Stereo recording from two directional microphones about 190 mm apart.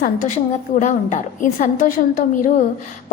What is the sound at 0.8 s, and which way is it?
A woman's voice, 40° left (ahead or behind).